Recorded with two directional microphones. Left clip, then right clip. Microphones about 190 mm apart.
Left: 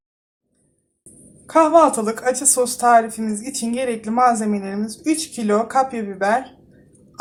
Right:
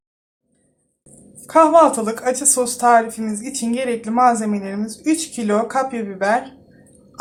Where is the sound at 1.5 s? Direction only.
Centre (ahead or behind).